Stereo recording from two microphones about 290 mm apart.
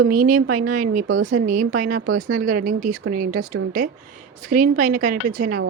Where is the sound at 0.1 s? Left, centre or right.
Right.